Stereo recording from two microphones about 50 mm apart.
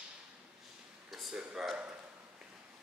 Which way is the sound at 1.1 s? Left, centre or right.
Centre.